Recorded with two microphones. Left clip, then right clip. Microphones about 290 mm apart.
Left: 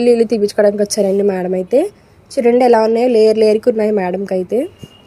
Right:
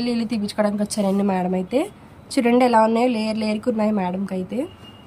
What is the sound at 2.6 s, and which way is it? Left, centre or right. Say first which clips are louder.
A woman's voice: left 5 dB; centre.